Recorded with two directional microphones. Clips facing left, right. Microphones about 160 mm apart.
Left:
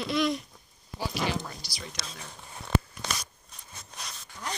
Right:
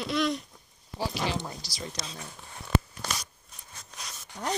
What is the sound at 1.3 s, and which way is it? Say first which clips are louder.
Speech: even; 25° right (ahead or behind).